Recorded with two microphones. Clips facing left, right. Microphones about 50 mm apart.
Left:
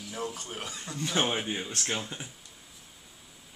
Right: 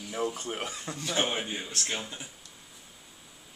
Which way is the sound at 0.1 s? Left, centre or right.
Right.